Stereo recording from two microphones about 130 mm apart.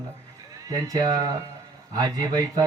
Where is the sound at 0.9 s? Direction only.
30° right (ahead or behind).